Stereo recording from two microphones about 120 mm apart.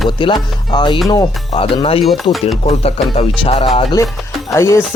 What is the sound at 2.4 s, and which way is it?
Speech, 55° left (ahead or behind).